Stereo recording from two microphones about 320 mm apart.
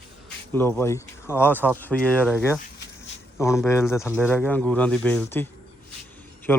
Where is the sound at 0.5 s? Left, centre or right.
Centre.